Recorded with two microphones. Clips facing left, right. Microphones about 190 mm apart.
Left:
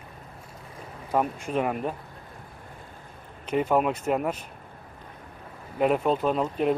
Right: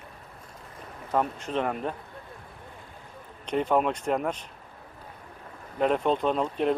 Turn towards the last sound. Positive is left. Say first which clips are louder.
# left 1 dB
turn(degrees=5)  # may be behind; listen again after turning